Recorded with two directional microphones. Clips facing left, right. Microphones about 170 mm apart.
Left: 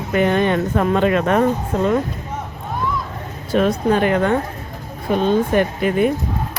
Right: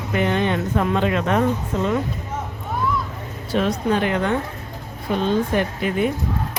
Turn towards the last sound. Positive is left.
turn(degrees=50)  # may be behind; listen again after turning